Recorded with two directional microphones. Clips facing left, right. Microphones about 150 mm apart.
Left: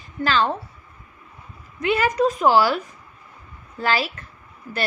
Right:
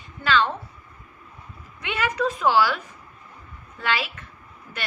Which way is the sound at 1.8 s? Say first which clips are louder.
Left 6 dB; 40° left (ahead or behind).